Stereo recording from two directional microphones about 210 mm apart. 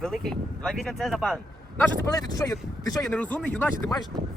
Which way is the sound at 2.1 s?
15° left (ahead or behind).